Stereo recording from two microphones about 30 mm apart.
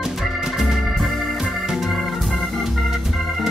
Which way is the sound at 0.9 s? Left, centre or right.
Centre.